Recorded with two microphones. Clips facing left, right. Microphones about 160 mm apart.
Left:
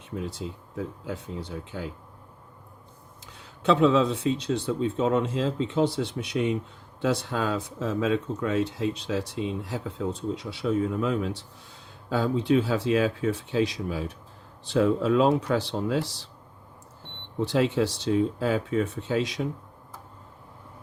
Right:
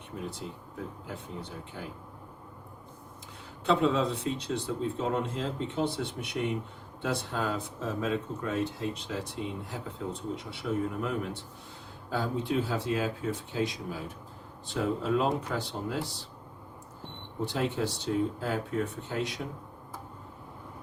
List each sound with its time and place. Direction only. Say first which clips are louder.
1.0 s speech: left 5 dB; 90° left
3.6 s speech: left 5 dB; 90° left
17.4 s speech: left 7 dB; 90° left